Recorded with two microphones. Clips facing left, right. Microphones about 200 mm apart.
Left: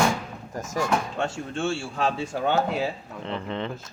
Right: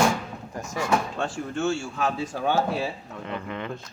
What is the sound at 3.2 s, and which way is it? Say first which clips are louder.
Speech: left 3 dB; 30° left (ahead or behind).